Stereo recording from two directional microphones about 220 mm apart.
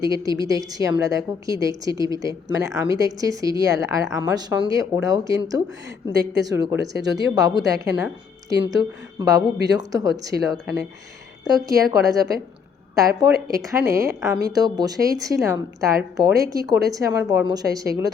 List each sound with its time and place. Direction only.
0.0 s a woman's voice: 15° right (ahead or behind)